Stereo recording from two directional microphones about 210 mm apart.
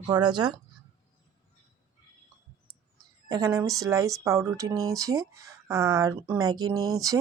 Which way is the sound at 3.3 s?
15° right (ahead or behind).